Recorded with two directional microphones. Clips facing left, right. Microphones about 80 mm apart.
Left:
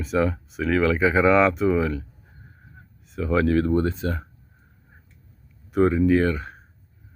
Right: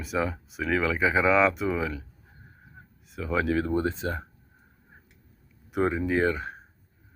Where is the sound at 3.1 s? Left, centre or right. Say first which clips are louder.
Left 5 dB; centre; by 4.2 s right.